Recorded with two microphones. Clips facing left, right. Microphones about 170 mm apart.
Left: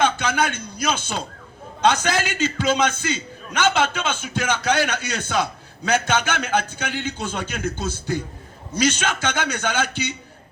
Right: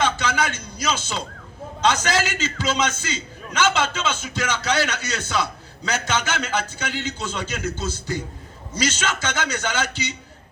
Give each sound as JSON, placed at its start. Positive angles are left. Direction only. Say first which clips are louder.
{"t": 0.0, "sound": "a man's voice", "louder": "left 2 dB", "side_deg": 55}